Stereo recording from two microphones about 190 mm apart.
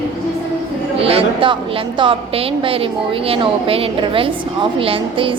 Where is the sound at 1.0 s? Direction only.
30° right (ahead or behind).